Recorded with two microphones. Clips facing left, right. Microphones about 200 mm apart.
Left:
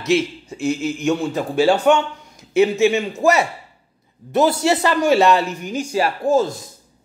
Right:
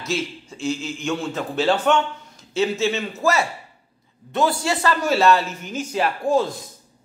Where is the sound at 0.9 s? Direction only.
15° left (ahead or behind).